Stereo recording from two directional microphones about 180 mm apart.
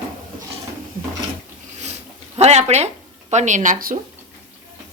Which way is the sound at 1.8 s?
35° right (ahead or behind).